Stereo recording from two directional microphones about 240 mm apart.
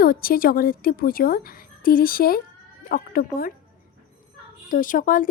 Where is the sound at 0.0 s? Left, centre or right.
Left.